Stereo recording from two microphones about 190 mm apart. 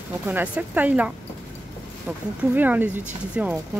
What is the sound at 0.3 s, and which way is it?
Speech, 10° right (ahead or behind).